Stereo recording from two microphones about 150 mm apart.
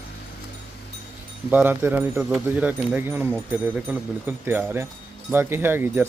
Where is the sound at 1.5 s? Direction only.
15° right (ahead or behind).